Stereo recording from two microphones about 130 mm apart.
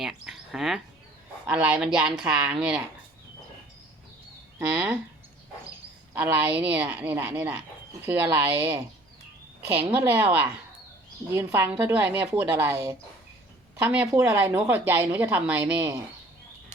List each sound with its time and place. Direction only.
0.0 s a woman's voice: 5° right (ahead or behind)
4.7 s a woman's voice: 15° right (ahead or behind)
6.1 s a woman's voice: 15° right (ahead or behind)
13.8 s a woman's voice: 15° right (ahead or behind)